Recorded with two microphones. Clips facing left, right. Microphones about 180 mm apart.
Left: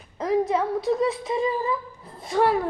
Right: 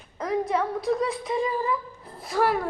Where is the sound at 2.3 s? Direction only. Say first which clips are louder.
Left 3 dB; 25° left (ahead or behind).